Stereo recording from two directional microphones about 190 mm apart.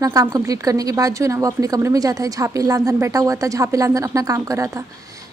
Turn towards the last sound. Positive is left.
turn(degrees=-15)  # may be behind; listen again after turning